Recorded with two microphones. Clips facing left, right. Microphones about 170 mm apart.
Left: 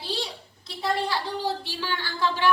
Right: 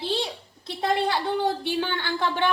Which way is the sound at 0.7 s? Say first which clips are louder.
Right 3 dB; 60° right (ahead or behind).